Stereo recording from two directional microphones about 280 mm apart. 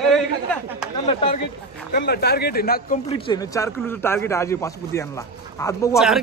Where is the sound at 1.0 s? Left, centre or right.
Left.